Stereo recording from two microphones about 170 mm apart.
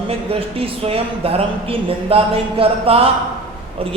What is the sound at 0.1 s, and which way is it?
Speech, 35° right (ahead or behind).